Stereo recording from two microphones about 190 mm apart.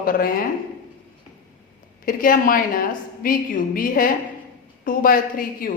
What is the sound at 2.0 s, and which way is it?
A woman's voice, 45° left (ahead or behind).